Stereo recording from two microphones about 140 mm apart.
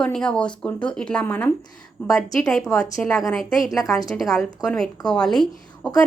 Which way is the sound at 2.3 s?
Centre (ahead or behind).